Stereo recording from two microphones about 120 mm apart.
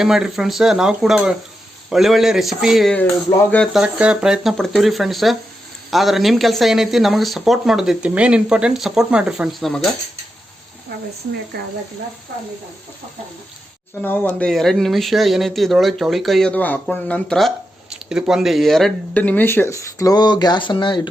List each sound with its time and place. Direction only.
0.0 s speech: 5° right (ahead or behind)
14.0 s speech: 15° left (ahead or behind); by 21.1 s 40° left (ahead or behind)